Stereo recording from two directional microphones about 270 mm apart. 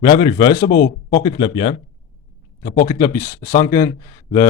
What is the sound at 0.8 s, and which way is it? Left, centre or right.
Speech, left.